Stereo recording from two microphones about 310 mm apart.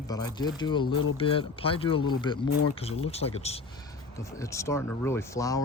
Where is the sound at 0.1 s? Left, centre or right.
Centre.